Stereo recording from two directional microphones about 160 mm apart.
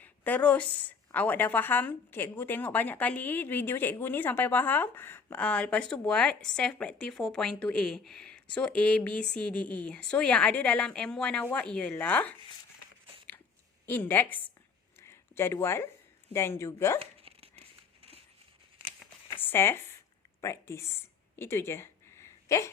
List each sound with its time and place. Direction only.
0.0 s a woman's voice: 10° left (ahead or behind)
13.8 s a woman's voice: 10° left (ahead or behind)
15.0 s a sound: 15° left (ahead or behind)
16.3 s a woman's voice: 15° left (ahead or behind)
17.0 s dog: 40° right (ahead or behind)
19.4 s speech: 15° left (ahead or behind)
21.3 s a sound: 15° left (ahead or behind)